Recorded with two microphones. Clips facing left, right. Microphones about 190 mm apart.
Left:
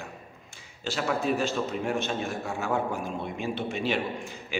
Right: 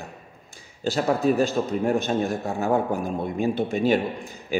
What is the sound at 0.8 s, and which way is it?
A man's voice, 40° right (ahead or behind).